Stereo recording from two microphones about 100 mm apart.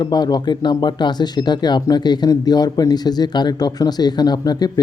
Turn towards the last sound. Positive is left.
turn(degrees=45)  # may be behind; listen again after turning